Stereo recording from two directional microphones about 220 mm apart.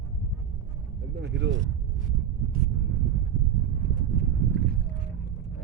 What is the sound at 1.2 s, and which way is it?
Speech, 50° right (ahead or behind).